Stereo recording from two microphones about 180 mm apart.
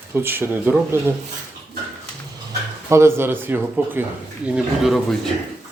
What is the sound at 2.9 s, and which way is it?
Speech, 15° right (ahead or behind).